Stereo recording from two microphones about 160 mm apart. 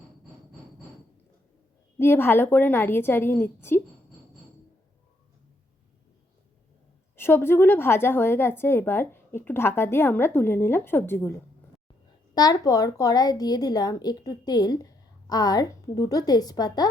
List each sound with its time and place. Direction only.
2.0 s a woman's voice: 15° left (ahead or behind)
7.2 s a woman's voice: 15° left (ahead or behind)
12.3 s a woman's voice: 25° left (ahead or behind)